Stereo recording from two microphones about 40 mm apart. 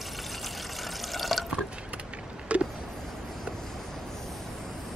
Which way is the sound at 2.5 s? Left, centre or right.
Right.